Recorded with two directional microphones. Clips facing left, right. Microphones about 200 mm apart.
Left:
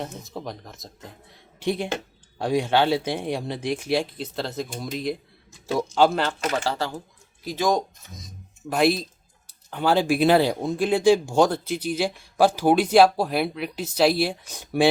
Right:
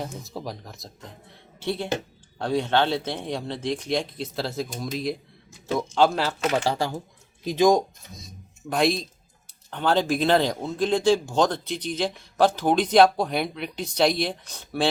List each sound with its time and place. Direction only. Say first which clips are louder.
0.0 s speech: even; centre (ahead or behind)
1.5 s speech: left 1 dB; 15° left (ahead or behind); by 6.3 s centre (ahead or behind)
6.5 s speech: right 2 dB; 15° right (ahead or behind)
8.7 s speech: left 2 dB; 5° left (ahead or behind)